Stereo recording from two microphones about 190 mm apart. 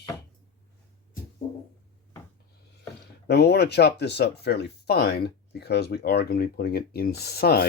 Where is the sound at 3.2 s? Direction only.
60° left (ahead or behind).